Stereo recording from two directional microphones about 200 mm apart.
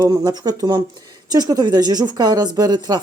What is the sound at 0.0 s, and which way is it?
A woman's voice, 15° right (ahead or behind).